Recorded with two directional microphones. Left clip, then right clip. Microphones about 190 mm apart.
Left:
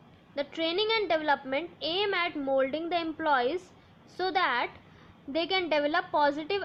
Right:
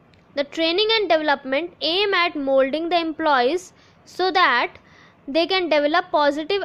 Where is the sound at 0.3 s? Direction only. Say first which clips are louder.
Right 9 dB; 45° right (ahead or behind).